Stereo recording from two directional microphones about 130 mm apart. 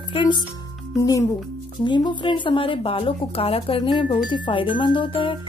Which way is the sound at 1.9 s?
40° left (ahead or behind).